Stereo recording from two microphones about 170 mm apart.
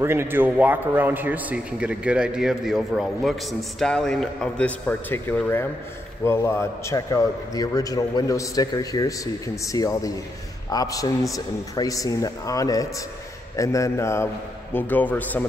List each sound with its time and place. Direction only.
0.0 s a man's voice: 15° right (ahead or behind); by 15.4 s 10° left (ahead or behind)